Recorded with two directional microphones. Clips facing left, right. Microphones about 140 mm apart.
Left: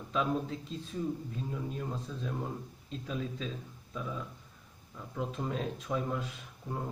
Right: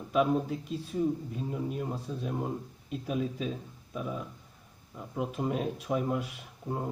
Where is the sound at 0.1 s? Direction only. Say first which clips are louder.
Right 5 dB; 15° right (ahead or behind).